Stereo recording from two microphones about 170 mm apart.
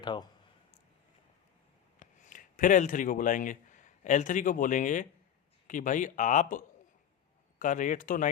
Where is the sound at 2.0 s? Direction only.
50° left (ahead or behind).